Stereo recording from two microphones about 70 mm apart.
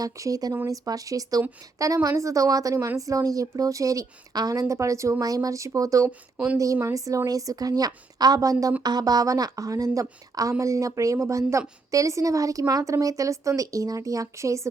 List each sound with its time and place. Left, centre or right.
0.0 s a woman's voice: right
2.7 s a woman's voice: right
4.7 s a woman's voice: right
5.2 s a woman's voice: right
6.1 s speech: centre
6.9 s a woman's voice: right
8.8 s a woman's voice: right